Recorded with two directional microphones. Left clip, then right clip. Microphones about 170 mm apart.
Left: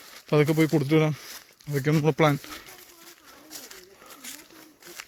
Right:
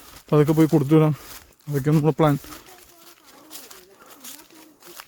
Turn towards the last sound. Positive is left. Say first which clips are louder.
# left 1 dB
turn(degrees=0)  # may be behind; listen again after turning